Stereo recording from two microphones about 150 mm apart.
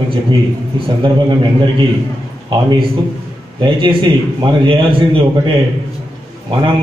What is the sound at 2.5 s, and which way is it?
A man's voice, 30° right (ahead or behind).